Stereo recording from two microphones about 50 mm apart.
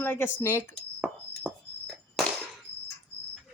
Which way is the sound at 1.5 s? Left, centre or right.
Centre.